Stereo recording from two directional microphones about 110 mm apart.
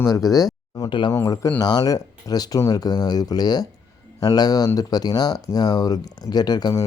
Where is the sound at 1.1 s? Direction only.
30° left (ahead or behind).